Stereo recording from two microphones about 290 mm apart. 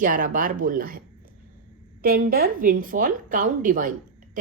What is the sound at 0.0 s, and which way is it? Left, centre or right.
Speech, right.